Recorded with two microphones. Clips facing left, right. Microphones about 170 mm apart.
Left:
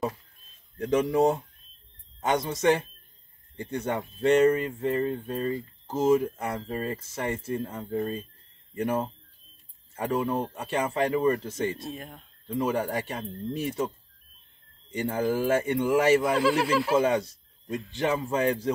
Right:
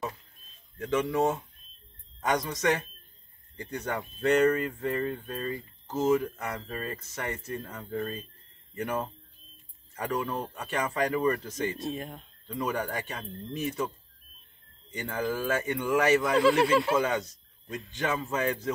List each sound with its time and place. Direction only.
0.7 s speech: 35° left (ahead or behind)
11.9 s speech: centre (ahead or behind)
12.4 s speech: 30° left (ahead or behind)
15.0 s speech: 30° left (ahead or behind)
16.3 s speech: 5° left (ahead or behind)
16.9 s speech: 30° left (ahead or behind)